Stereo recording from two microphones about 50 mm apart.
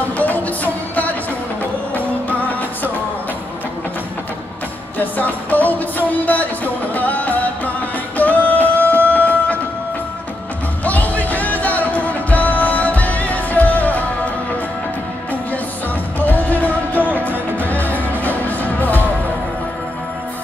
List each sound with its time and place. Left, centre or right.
0.2 s music: left
2.2 s music: left
4.9 s music: left
10.8 s music: left
16.2 s music: left